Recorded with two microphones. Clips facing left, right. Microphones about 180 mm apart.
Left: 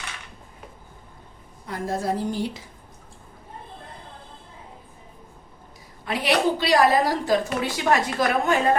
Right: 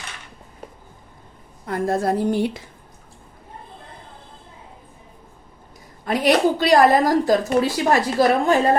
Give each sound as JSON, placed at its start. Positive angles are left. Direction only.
{"t": 1.6, "sound": "a woman's voice", "side_deg": -55}
{"t": 6.1, "sound": "a woman's voice", "side_deg": -45}